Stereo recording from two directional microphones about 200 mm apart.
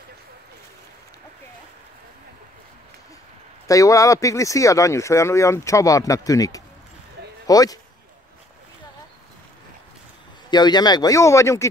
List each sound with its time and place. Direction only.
3.6 s speech: 15° left (ahead or behind)
10.5 s speech: 20° left (ahead or behind)